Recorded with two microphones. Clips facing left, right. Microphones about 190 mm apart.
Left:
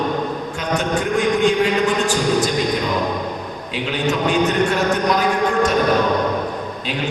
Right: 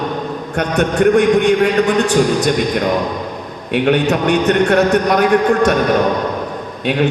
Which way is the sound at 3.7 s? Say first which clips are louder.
Right 8 dB; 60° right (ahead or behind).